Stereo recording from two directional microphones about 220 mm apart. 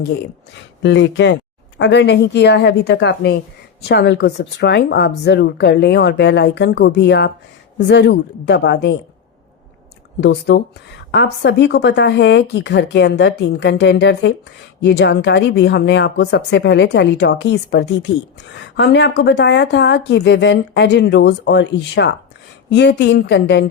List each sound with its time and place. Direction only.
0.8 s a woman's voice: 55° left (ahead or behind)
10.2 s a woman's voice: 50° left (ahead or behind)